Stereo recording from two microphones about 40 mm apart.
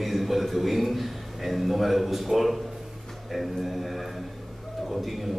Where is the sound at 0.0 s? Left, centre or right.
Centre.